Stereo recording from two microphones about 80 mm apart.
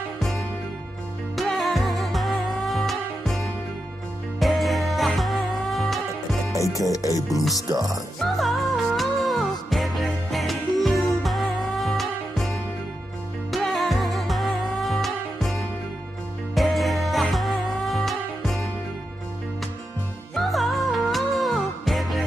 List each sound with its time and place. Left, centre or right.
1.3 s music: centre
6.5 s speech: left
7.7 s speech: right
8.2 s music: centre
20.3 s music: centre